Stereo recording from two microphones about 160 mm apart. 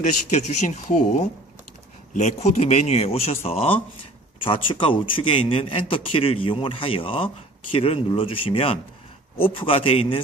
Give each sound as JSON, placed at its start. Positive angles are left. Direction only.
{"t": 0.0, "sound": "a man's voice", "side_deg": 45}